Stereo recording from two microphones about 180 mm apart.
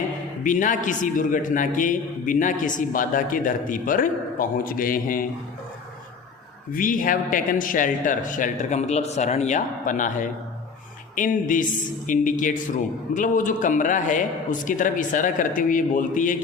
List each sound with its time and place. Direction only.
0.4 s a man's voice: 45° left (ahead or behind)
6.7 s a man's voice: 50° left (ahead or behind)